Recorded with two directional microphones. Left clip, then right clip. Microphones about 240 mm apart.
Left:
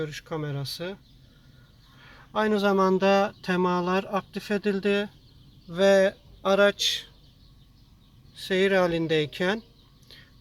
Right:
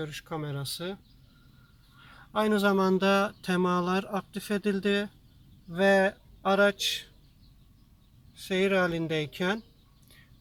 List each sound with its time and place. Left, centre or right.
0.0 s speech: centre
2.3 s speech: centre
8.4 s speech: centre